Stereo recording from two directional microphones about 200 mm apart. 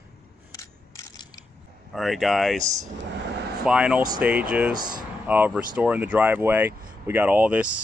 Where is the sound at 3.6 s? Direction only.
5° right (ahead or behind).